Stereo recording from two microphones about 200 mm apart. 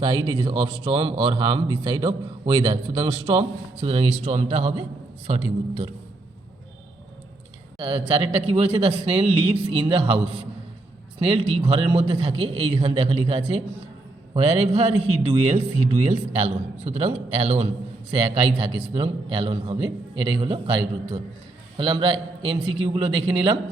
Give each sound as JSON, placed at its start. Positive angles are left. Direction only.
{"t": 0.0, "sound": "a man's voice", "side_deg": -25}
{"t": 7.8, "sound": "a man's voice", "side_deg": -25}